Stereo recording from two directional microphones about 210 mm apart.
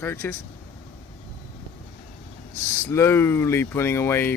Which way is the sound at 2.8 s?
10° left (ahead or behind).